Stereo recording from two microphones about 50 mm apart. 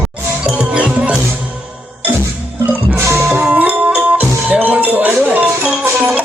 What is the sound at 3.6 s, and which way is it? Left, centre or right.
Music, right.